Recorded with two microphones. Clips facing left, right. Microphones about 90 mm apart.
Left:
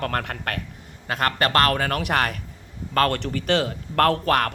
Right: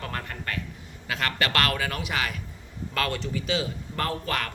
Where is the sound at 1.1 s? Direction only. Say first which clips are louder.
Left 5 dB; 45° left (ahead or behind).